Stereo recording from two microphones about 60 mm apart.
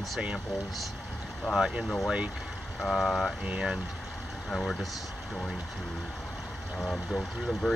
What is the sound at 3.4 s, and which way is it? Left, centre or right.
Speech, centre.